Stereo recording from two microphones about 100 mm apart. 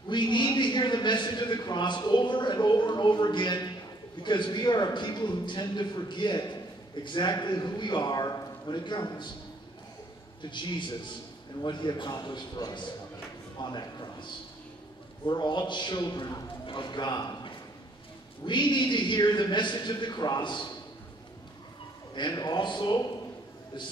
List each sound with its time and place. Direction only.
0.1 s a man's voice: 50° left (ahead or behind)
10.4 s a man's voice: 50° left (ahead or behind)
16.6 s a man's voice: 50° left (ahead or behind)
22.1 s a man's voice: 45° left (ahead or behind)